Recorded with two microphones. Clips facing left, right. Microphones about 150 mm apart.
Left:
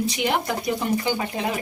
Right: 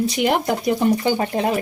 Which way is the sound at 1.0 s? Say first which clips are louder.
Right 6 dB; 45° right (ahead or behind).